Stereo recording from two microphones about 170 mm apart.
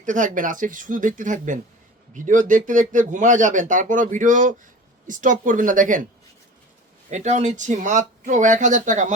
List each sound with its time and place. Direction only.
0.0 s speech: 50° right (ahead or behind)
7.1 s speech: 45° right (ahead or behind)